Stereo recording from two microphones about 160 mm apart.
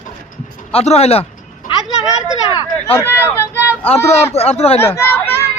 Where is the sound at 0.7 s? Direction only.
40° left (ahead or behind).